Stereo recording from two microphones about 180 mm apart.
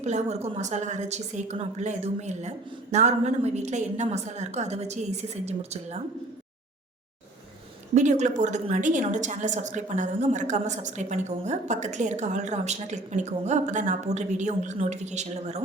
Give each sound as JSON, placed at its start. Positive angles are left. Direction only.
{"t": 0.0, "sound": "a woman's voice", "side_deg": -40}
{"t": 7.9, "sound": "a woman's voice", "side_deg": -40}